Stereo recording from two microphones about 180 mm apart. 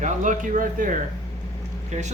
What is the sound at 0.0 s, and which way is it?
Speech, 45° right (ahead or behind).